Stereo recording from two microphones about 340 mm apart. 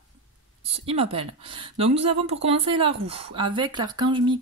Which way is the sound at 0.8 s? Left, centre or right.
Centre.